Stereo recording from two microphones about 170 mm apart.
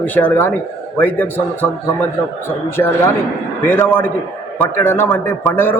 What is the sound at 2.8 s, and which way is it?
A man's voice, 15° left (ahead or behind).